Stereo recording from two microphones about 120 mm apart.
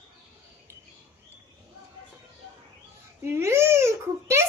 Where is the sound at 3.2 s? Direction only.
20° right (ahead or behind).